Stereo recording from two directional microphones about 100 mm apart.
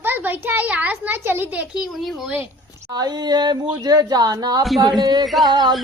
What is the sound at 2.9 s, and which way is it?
Speech, 40° right (ahead or behind).